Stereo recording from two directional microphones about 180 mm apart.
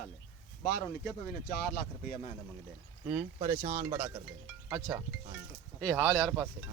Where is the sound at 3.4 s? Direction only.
20° right (ahead or behind).